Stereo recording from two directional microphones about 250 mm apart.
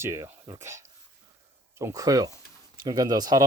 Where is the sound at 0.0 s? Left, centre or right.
Centre.